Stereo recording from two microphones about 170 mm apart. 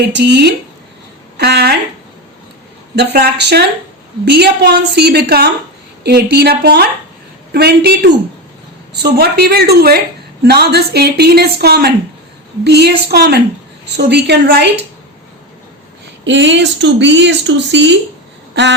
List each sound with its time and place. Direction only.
0.1 s a woman's voice: 90° right
1.4 s speech: 70° right (ahead or behind)
2.9 s a woman's voice: 75° right (ahead or behind)
16.2 s speech: 90° right